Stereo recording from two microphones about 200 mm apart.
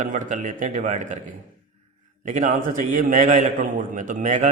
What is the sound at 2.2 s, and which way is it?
Speech, 40° right (ahead or behind).